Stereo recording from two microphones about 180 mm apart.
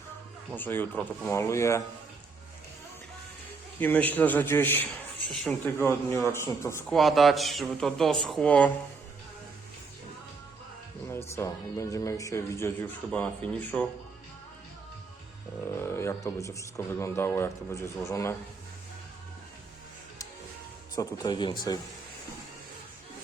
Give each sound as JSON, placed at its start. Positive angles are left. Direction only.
{"t": 0.5, "sound": "speech", "side_deg": 10}
{"t": 3.8, "sound": "speech", "side_deg": 10}
{"t": 6.9, "sound": "speech", "side_deg": 0}
{"t": 11.1, "sound": "speech", "side_deg": 15}
{"t": 15.7, "sound": "speech", "side_deg": 15}
{"t": 20.9, "sound": "speech", "side_deg": 20}